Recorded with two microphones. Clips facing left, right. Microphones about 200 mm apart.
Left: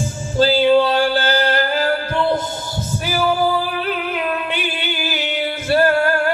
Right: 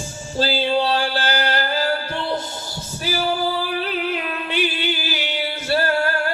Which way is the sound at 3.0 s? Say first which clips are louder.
Left 4 dB; 55° left (ahead or behind).